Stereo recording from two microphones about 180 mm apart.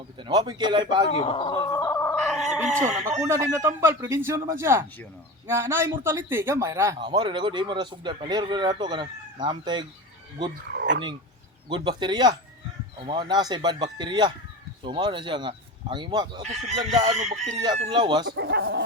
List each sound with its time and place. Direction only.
0.2 s speech: 25° right (ahead or behind)
1.1 s chicken: 30° left (ahead or behind); by 2.2 s 15° left (ahead or behind)
2.2 s fowl: centre (ahead or behind)
3.2 s a man's voice: 15° right (ahead or behind)
7.0 s speech: 25° right (ahead or behind)
10.8 s dog: 85° right
11.7 s speech: 25° right (ahead or behind)
16.4 s chicken: 40° right (ahead or behind)
17.7 s speech: 30° right (ahead or behind)
18.3 s speech: 70° right (ahead or behind)